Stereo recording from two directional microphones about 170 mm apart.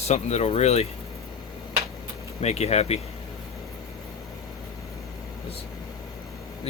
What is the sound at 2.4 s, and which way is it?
Speech, 40° left (ahead or behind).